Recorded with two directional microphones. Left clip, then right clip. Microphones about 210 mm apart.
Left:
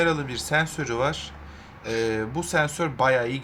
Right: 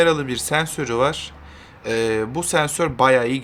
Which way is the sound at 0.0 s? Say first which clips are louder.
Right 6 dB; 30° right (ahead or behind).